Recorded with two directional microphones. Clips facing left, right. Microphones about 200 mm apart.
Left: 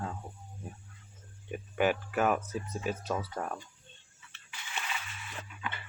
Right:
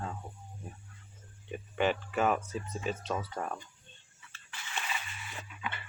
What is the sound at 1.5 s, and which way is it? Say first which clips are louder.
Speech: left 1 dB; 5° left (ahead or behind).